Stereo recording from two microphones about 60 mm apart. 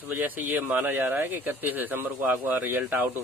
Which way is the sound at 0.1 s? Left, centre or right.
Right.